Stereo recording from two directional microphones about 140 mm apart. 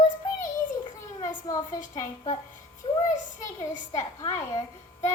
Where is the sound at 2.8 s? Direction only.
40° left (ahead or behind).